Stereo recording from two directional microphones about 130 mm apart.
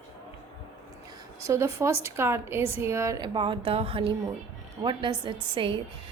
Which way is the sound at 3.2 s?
35° right (ahead or behind).